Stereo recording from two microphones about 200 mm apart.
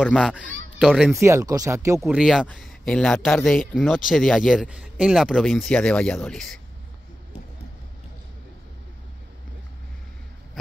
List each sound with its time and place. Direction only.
0.0 s speech: 5° left (ahead or behind)
1.2 s speech: 15° right (ahead or behind)
2.0 s speech: 5° right (ahead or behind)